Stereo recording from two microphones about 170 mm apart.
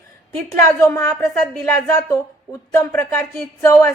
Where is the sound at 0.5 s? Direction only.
15° left (ahead or behind).